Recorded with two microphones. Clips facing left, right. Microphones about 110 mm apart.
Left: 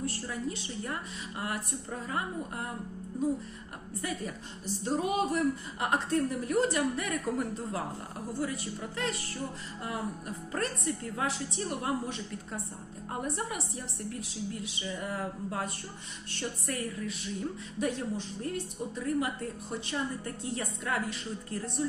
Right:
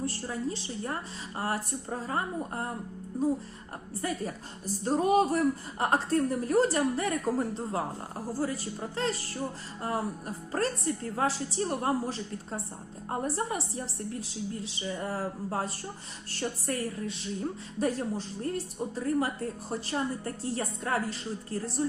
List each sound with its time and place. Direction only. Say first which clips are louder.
0.0 s a woman's voice: right 2 dB; 30° right (ahead or behind)
4.0 s a woman's voice: right 3 dB; 40° right (ahead or behind)